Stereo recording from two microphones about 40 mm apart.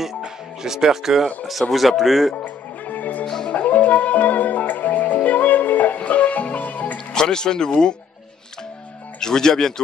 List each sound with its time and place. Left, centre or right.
0.2 s music: centre
1.5 s speech: centre
2.3 s music: left
3.3 s music: centre
3.5 s music: left
7.2 s speech: centre
9.2 s speech: centre